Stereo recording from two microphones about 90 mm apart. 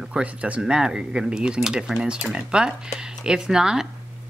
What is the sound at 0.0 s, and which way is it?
Speech, 10° right (ahead or behind).